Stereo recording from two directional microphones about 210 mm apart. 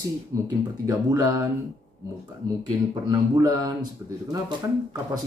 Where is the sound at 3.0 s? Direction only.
15° right (ahead or behind).